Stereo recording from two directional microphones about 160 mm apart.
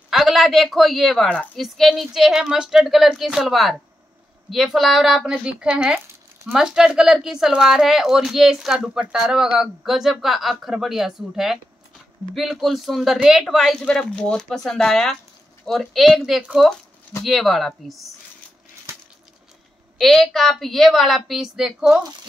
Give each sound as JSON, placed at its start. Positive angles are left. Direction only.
{"t": 0.1, "sound": "speech", "side_deg": 0}
{"t": 18.9, "sound": "coin", "side_deg": -15}
{"t": 20.0, "sound": "speech", "side_deg": 0}